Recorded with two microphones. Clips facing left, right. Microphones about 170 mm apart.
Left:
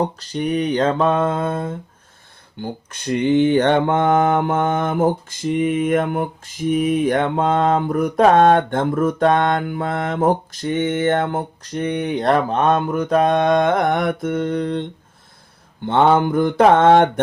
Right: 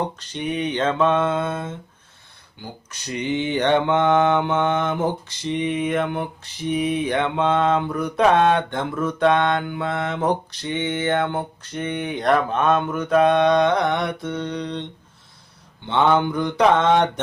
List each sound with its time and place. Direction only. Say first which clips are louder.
0.0 s mantra: left 5 dB; 35° left (ahead or behind)
2.6 s mantra: left 9 dB; 55° left (ahead or behind)
15.9 s mantra: left 4 dB; 50° left (ahead or behind)